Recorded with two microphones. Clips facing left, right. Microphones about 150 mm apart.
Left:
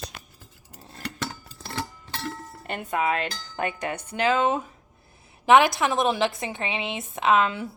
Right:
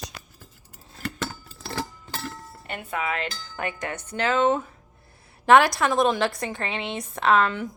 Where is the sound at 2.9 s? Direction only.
25° left (ahead or behind).